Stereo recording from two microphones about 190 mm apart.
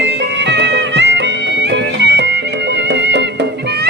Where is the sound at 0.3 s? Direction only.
65° right (ahead or behind).